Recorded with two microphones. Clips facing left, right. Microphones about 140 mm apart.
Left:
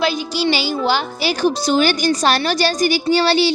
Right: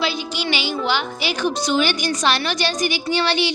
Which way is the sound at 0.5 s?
35° left (ahead or behind).